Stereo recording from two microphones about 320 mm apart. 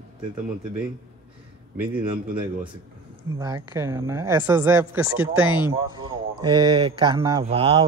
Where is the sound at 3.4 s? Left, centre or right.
Centre.